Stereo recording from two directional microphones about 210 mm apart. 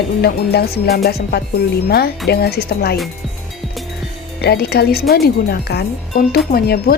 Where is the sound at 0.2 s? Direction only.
50° left (ahead or behind).